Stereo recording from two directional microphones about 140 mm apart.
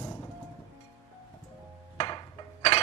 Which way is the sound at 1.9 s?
35° left (ahead or behind).